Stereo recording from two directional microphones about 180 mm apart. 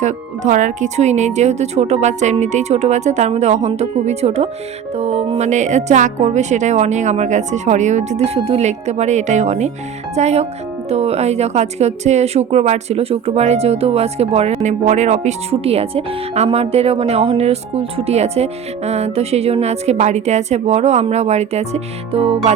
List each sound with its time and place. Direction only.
0.0 s a woman's voice: 45° right (ahead or behind)